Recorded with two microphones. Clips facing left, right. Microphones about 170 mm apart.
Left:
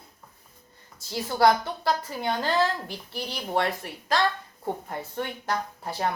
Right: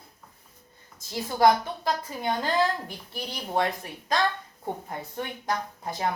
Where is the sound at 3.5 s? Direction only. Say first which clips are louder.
Even; 20° right (ahead or behind).